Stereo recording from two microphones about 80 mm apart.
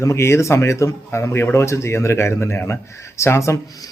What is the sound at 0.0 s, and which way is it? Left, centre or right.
A man's voice, left.